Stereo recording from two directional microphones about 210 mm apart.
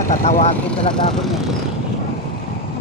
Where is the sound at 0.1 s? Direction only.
35° left (ahead or behind).